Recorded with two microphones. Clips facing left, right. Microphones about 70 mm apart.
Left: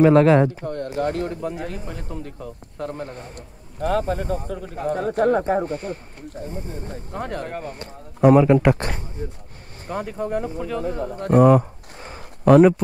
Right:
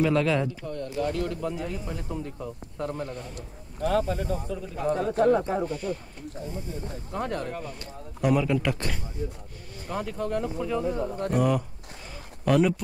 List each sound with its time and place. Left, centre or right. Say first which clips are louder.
0.0 s speech: left 10 dB; left
2.8 s speech: left 2 dB; left
4.7 s speech: left 2 dB; left
9.9 s speech: left 4 dB; centre
10.7 s speech: even; left